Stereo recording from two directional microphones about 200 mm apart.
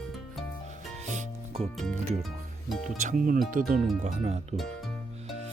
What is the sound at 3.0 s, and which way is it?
Speech, 40° right (ahead or behind).